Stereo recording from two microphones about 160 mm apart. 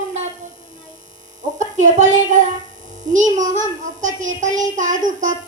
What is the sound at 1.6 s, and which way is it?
A woman's voice, 50° right (ahead or behind).